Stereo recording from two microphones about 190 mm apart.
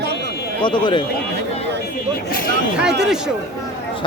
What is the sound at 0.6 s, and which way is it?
Speech, 25° left (ahead or behind).